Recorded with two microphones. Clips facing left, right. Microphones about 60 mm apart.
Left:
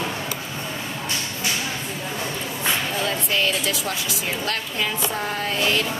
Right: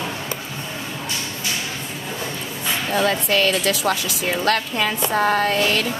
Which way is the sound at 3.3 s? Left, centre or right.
Right.